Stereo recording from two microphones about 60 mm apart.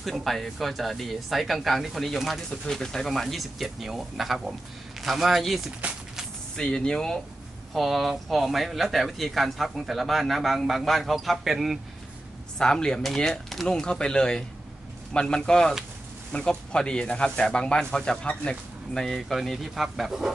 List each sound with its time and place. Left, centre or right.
0.0 s speech: centre
2.6 s speech: centre
5.8 s speech: right
6.5 s speech: centre
7.7 s speech: centre
12.5 s speech: centre